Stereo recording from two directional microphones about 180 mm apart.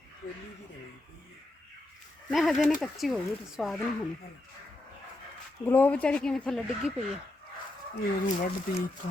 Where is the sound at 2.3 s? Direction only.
Centre (ahead or behind).